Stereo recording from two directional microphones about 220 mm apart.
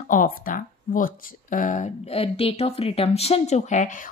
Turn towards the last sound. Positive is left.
turn(degrees=35)  # may be behind; listen again after turning